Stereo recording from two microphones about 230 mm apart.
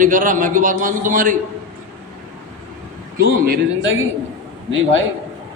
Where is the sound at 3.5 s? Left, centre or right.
Right.